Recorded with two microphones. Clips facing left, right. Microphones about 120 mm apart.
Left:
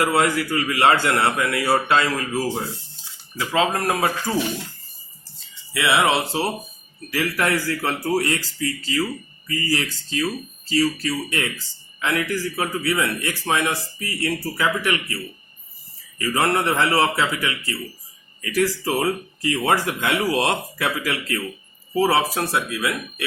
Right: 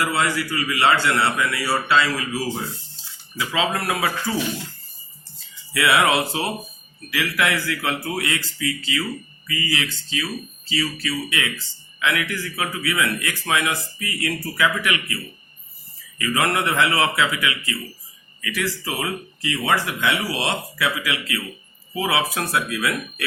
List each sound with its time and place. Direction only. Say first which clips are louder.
0.0 s a man's voice: left 3 dB; 55° left (ahead or behind)
5.7 s speech: right 1 dB; 25° left (ahead or behind)
7.1 s a man's voice: left 1 dB; 40° left (ahead or behind)
22.4 s speech: even; 25° left (ahead or behind)